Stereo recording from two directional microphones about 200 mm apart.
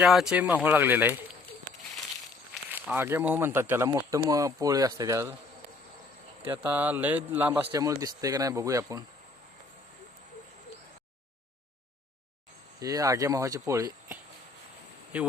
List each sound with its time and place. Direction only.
0.0 s a man's voice: 5° right (ahead or behind)
2.7 s a man's voice: 10° right (ahead or behind)
6.4 s a man's voice: 10° right (ahead or behind)
12.8 s a man's voice: 15° right (ahead or behind)